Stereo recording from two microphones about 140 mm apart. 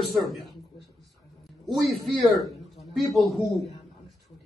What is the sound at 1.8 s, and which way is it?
A man's voice, centre (ahead or behind).